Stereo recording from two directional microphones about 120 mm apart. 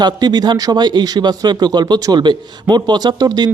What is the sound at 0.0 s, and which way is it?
A man's voice, 35° right (ahead or behind).